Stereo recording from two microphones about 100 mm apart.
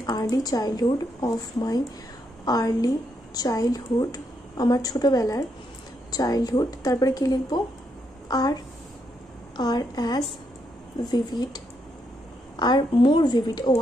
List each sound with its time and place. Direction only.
0.0 s a woman's voice: 35° left (ahead or behind)
9.6 s a woman's voice: 40° left (ahead or behind)